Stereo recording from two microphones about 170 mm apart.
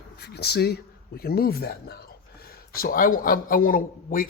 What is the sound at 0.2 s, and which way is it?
Speech, 75° left (ahead or behind).